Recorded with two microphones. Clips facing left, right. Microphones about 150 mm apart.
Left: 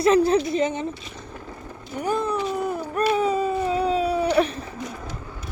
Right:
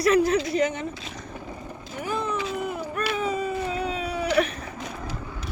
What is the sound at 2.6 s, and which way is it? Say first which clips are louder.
Run: left 3 dB; 35° left (ahead or behind).